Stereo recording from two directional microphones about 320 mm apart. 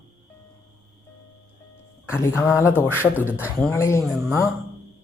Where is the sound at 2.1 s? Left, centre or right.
Centre.